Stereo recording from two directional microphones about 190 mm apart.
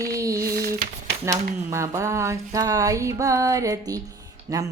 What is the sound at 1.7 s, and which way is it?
Speech, 15° right (ahead or behind).